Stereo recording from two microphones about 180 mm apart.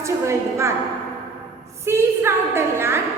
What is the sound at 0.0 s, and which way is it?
Speech, 15° right (ahead or behind).